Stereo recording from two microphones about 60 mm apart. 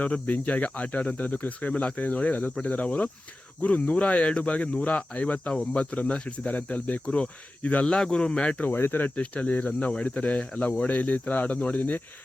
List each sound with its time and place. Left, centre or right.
0.0 s speech: left
7.9 s speech: centre
8.7 s speech: left